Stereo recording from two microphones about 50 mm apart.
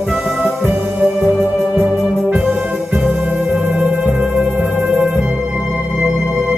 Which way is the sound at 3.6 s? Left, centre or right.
Right.